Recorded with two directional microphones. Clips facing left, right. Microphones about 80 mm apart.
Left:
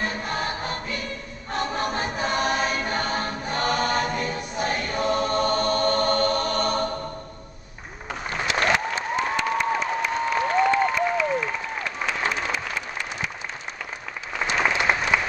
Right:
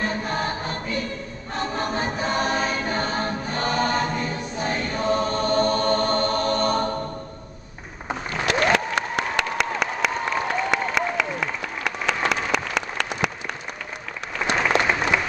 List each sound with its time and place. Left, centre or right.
0.3 s choir: right
8.5 s applause: right
14.7 s applause: right
15.1 s applause: centre